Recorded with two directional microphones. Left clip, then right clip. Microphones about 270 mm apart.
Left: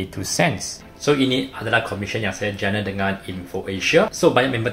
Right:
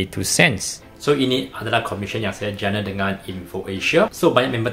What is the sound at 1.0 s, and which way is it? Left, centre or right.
Speech, centre.